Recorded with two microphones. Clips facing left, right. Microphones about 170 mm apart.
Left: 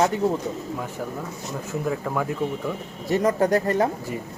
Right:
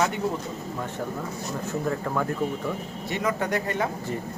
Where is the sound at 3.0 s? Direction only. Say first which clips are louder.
Left 7 dB; 40° left (ahead or behind).